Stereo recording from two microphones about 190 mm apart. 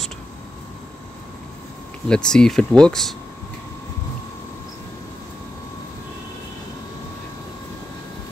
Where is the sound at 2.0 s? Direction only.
5° left (ahead or behind).